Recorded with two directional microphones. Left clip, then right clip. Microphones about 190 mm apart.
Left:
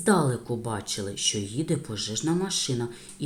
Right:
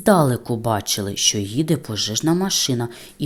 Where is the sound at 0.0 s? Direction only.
40° right (ahead or behind).